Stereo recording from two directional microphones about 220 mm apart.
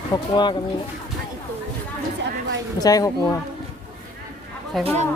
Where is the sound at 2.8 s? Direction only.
15° left (ahead or behind).